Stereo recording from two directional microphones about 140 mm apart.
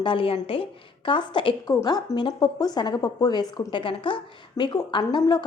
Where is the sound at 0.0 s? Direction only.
40° left (ahead or behind).